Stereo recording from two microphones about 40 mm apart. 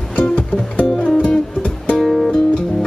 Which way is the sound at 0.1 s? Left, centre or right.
Left.